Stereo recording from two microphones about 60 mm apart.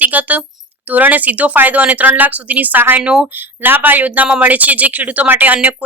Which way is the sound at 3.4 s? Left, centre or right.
Right.